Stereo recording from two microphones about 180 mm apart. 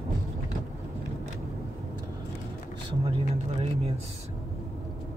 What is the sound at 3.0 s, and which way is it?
Speech, 30° right (ahead or behind).